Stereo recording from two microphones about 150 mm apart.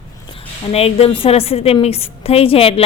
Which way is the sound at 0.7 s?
40° left (ahead or behind).